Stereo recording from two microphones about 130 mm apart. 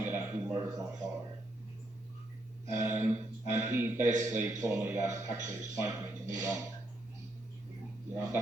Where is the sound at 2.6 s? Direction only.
25° right (ahead or behind).